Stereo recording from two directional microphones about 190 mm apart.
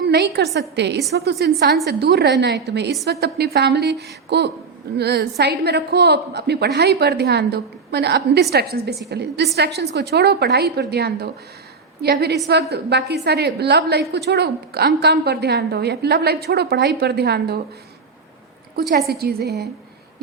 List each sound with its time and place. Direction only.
0.1 s a woman's voice: 60° right (ahead or behind)
18.8 s a woman's voice: 55° right (ahead or behind)